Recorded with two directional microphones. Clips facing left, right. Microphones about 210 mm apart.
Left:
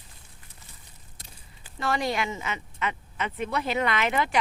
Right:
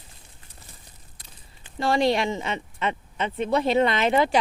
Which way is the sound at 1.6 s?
30° right (ahead or behind).